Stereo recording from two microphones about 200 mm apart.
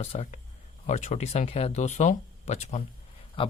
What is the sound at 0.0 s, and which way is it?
Speech, 30° left (ahead or behind).